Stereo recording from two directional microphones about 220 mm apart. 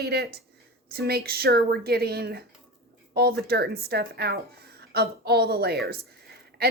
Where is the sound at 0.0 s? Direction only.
45° right (ahead or behind).